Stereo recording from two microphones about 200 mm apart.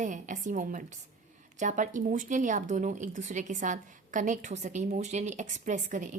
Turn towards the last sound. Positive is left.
turn(degrees=-40)  # may be behind; listen again after turning